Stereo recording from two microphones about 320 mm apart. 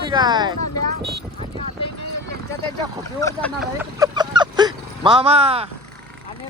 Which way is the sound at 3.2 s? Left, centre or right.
Centre.